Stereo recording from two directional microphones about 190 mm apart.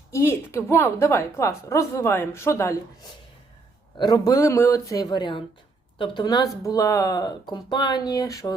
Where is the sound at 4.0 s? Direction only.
20° left (ahead or behind).